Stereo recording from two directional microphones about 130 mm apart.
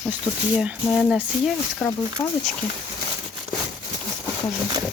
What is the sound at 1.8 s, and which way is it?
Speech, 5° left (ahead or behind).